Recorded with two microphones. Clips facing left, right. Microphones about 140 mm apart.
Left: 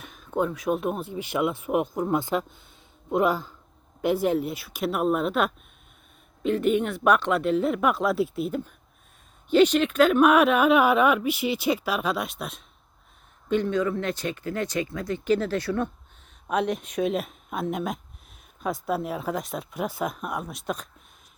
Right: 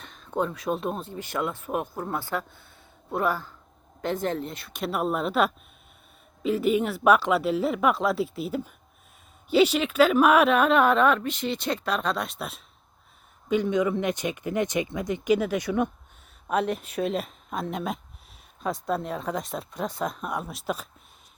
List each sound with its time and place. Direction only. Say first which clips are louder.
0.0 s speech: left 2 dB; 5° left (ahead or behind)
13.5 s speech: right 1 dB; 15° right (ahead or behind)
16.5 s speech: even; centre (ahead or behind)